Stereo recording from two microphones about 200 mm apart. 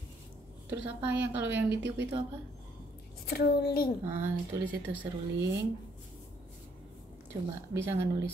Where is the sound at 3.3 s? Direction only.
50° left (ahead or behind).